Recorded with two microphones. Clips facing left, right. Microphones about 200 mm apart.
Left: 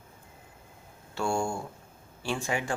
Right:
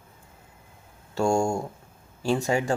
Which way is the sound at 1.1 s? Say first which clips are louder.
Right 6 dB; 45° right (ahead or behind).